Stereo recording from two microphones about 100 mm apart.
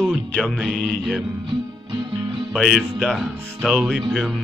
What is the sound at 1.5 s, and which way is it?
Music, 50° right (ahead or behind).